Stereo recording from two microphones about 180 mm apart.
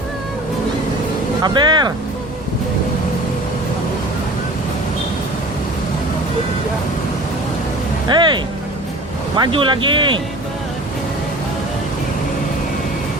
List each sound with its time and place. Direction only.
1.4 s speech: 25° right (ahead or behind)
8.0 s speech: 25° right (ahead or behind)